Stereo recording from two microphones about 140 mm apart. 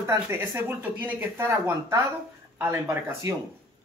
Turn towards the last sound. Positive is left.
turn(degrees=-20)  # may be behind; listen again after turning